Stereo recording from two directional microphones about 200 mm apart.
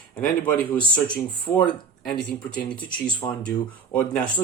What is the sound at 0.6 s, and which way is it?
Speech, 5° left (ahead or behind).